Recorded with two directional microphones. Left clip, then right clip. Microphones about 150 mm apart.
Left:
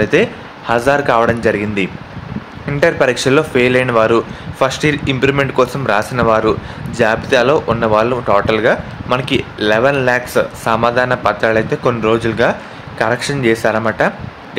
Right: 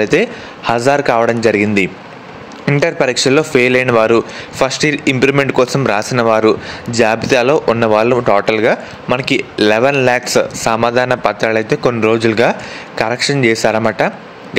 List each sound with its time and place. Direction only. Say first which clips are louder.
0.0 s speech: even; 35° right (ahead or behind)